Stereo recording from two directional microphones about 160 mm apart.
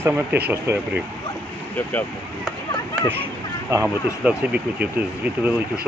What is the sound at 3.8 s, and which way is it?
Speech, 5° right (ahead or behind).